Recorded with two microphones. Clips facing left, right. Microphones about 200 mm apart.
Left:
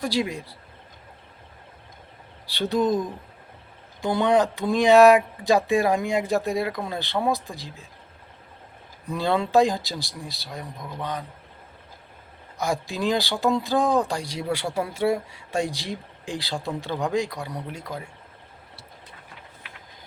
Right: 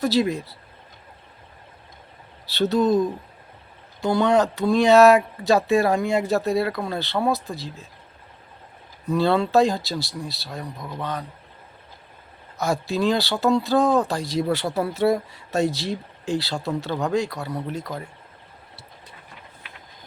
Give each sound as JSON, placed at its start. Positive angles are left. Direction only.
{"t": 0.0, "sound": "speech", "side_deg": 10}
{"t": 2.5, "sound": "speech", "side_deg": 15}
{"t": 4.0, "sound": "speech", "side_deg": 15}
{"t": 9.1, "sound": "speech", "side_deg": 15}
{"t": 12.5, "sound": "speech", "side_deg": 15}